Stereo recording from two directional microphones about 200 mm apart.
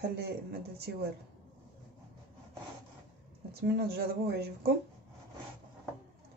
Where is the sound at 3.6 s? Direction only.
55° right (ahead or behind).